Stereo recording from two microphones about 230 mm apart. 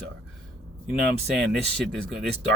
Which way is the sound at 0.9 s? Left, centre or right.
Right.